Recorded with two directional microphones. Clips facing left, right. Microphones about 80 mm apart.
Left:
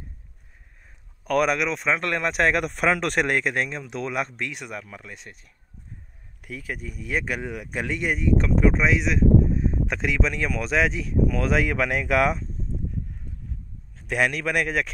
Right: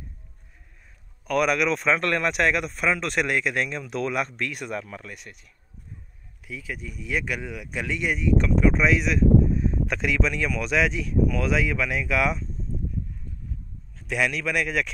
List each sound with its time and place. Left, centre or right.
1.2 s speech: left
1.6 s speech: centre
2.3 s speech: left
2.6 s a man's voice: left
3.8 s speech: left
4.7 s speech: centre
5.1 s speech: left
6.4 s speech: left
13.9 s a man's voice: left